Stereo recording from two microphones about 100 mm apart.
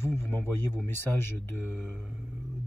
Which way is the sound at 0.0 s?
25° left (ahead or behind).